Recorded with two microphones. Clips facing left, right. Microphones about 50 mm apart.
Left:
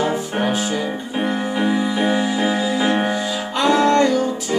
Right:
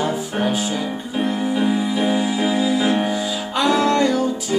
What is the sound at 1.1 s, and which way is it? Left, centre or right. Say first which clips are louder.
Music: right 1 dB; centre.